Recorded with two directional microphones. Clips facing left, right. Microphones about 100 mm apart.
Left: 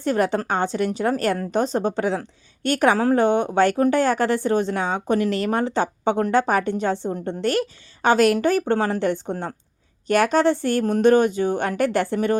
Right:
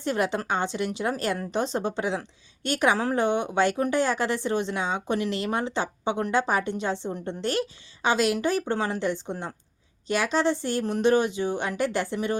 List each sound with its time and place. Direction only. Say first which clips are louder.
0.0 s a woman's voice: left 5 dB; 45° left (ahead or behind)